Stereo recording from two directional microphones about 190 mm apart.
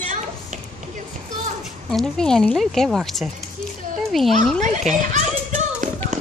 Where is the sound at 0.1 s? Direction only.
40° right (ahead or behind).